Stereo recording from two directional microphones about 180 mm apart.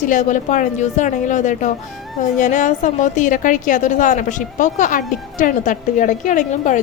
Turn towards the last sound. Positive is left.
turn(degrees=45)  # may be behind; listen again after turning